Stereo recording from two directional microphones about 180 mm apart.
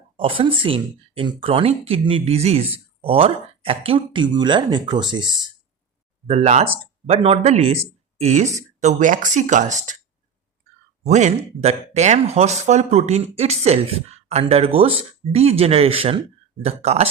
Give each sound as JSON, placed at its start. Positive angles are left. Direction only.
{"t": 0.2, "sound": "speech", "side_deg": -30}
{"t": 6.2, "sound": "speech", "side_deg": -35}
{"t": 11.0, "sound": "speech", "side_deg": -40}